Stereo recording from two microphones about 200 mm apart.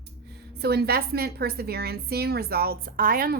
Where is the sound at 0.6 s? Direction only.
55° right (ahead or behind).